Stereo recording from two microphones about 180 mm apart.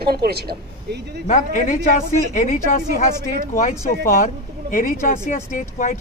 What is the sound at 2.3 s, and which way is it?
Speech, 45° left (ahead or behind).